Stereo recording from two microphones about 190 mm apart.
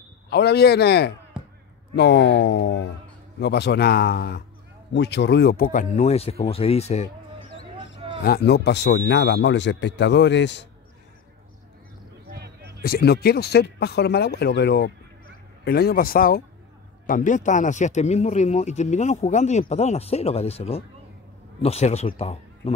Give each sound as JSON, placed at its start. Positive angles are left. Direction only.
{"t": 0.3, "sound": "speech", "side_deg": 60}
{"t": 1.3, "sound": "a sound", "side_deg": -5}
{"t": 2.0, "sound": "speech", "side_deg": 65}
{"t": 8.2, "sound": "speech", "side_deg": 55}
{"t": 12.3, "sound": "a sound", "side_deg": -60}
{"t": 12.8, "sound": "speech", "side_deg": 55}